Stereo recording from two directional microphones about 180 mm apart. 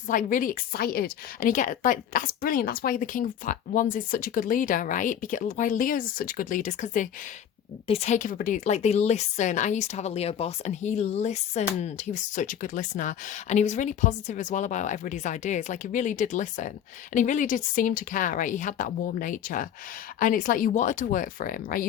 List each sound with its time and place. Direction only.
0.1 s a woman's voice: 45° left (ahead or behind)